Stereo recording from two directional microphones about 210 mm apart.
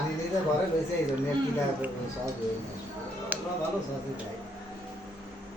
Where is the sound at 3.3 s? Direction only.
10° right (ahead or behind).